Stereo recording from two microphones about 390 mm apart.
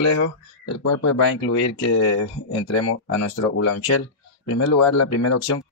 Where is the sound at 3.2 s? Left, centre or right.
Left.